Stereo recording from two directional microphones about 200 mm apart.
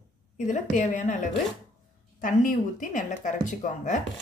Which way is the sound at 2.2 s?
40° left (ahead or behind).